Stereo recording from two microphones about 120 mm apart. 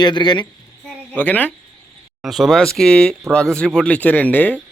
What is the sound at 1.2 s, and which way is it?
Speech, 15° left (ahead or behind).